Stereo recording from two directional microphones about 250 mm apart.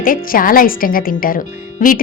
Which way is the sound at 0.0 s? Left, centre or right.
Left.